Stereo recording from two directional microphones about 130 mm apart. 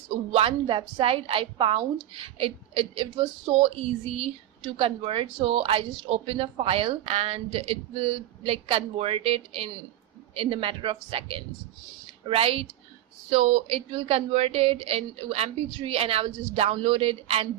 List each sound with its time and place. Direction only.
0.3 s speech: 45° right (ahead or behind)
4.8 s speech: 45° right (ahead or behind)